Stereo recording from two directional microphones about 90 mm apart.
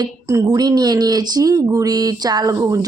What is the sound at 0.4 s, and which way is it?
Speech, 50° right (ahead or behind).